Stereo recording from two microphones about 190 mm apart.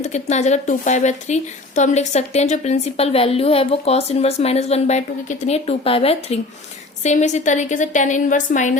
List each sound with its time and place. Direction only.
0.0 s a woman's voice: 35° left (ahead or behind)